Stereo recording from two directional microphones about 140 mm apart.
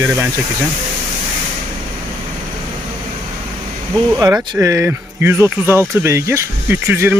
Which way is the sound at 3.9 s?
25° right (ahead or behind).